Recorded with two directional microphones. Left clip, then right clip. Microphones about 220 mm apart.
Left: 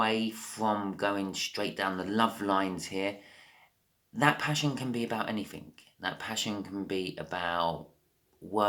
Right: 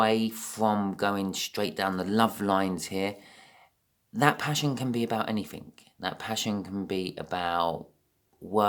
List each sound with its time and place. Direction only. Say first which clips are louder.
0.0 s speech: right 4 dB; 50° right (ahead or behind)